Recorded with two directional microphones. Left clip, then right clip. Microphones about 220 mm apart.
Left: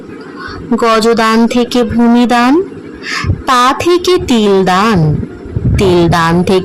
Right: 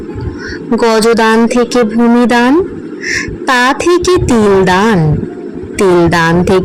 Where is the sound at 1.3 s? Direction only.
10° left (ahead or behind).